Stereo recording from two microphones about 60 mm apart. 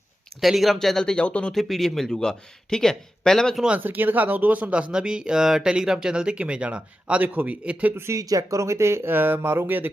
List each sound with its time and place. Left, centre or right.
0.4 s speech: centre
1.5 s speech: centre
3.8 s speech: right
8.1 s speech: right